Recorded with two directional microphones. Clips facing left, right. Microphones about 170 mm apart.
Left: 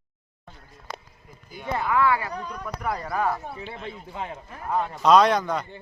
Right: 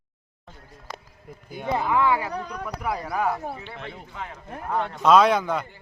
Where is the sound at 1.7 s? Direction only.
15° right (ahead or behind).